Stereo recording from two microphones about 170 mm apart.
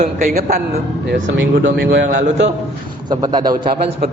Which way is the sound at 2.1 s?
50° right (ahead or behind).